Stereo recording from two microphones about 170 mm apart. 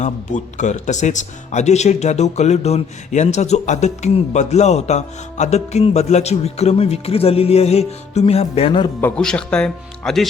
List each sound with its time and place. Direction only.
0.0 s speech: 45° left (ahead or behind)
9.0 s speech: 10° left (ahead or behind)